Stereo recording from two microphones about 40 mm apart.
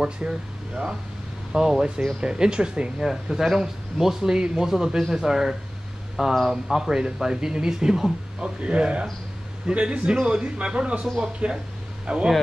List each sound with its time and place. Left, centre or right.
0.0 s speech: centre
3.0 s speech: centre
8.4 s speech: right